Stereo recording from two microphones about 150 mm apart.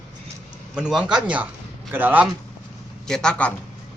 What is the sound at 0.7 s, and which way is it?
A man's voice, 5° right (ahead or behind).